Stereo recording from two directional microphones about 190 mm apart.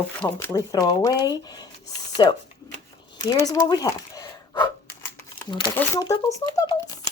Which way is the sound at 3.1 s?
20° left (ahead or behind).